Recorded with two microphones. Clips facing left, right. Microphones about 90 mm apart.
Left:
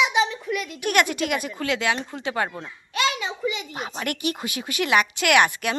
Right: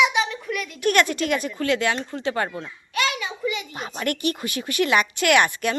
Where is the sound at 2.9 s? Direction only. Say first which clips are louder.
Left 1 dB; 25° left (ahead or behind).